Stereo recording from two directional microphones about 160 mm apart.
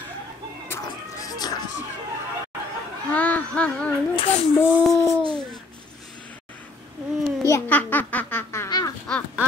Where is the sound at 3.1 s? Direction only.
10° left (ahead or behind).